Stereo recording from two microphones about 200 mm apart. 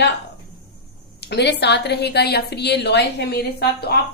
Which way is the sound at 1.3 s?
55° left (ahead or behind).